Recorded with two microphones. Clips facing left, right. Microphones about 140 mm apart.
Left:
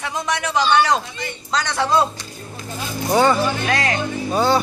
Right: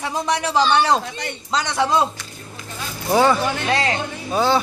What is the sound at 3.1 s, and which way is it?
Speech, centre (ahead or behind).